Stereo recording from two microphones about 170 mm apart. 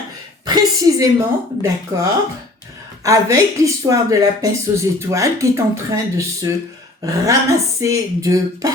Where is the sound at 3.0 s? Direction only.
20° right (ahead or behind).